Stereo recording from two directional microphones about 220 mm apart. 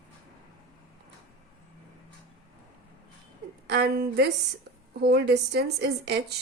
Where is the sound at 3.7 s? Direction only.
45° right (ahead or behind).